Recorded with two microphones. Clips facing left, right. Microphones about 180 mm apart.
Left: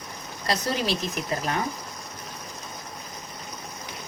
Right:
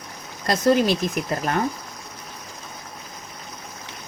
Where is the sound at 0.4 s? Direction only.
50° right (ahead or behind).